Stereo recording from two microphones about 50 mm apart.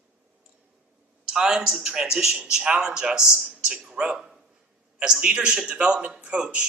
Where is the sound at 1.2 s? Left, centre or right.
Centre.